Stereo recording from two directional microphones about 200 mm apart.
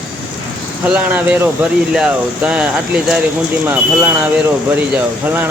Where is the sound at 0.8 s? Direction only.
5° right (ahead or behind).